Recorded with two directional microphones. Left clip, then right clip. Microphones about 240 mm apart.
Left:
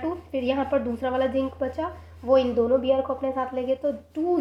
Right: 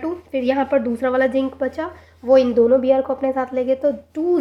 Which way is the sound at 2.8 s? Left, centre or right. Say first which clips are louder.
Right 6 dB; right.